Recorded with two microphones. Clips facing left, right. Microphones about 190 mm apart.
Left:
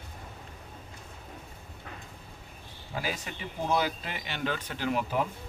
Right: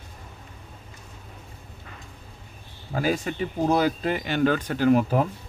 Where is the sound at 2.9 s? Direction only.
45° right (ahead or behind).